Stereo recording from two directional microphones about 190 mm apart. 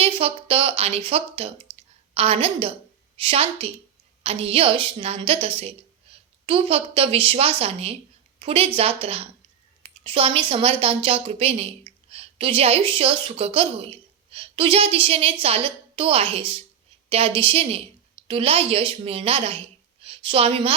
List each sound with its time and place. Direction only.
0.0 s a woman's voice: 30° right (ahead or behind)